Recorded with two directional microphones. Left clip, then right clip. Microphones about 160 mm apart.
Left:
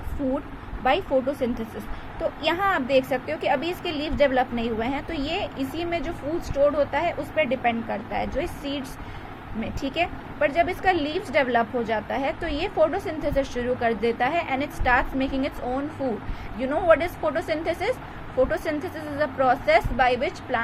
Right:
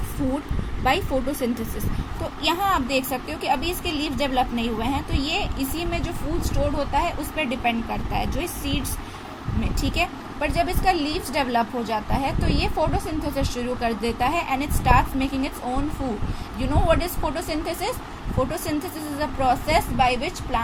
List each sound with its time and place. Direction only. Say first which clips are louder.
0.9 s a woman's voice: left 1 dB; 5° right (ahead or behind)
9.8 s a woman's voice: right 1 dB; 10° right (ahead or behind)
16.0 s speech: left 2 dB; 30° right (ahead or behind)
16.6 s a woman's voice: left 2 dB; 5° right (ahead or behind)